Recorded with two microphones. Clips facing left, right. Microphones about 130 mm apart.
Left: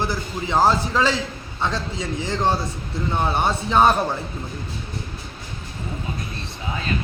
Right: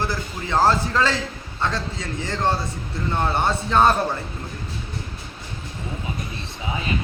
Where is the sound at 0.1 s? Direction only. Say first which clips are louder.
Left 1 dB; 20° left (ahead or behind).